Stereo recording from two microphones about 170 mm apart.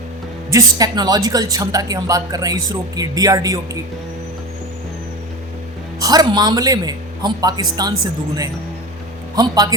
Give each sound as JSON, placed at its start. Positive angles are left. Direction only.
{"t": 0.5, "sound": "a woman's voice", "side_deg": -20}
{"t": 6.0, "sound": "a woman's voice", "side_deg": -20}
{"t": 9.3, "sound": "a woman's voice", "side_deg": -20}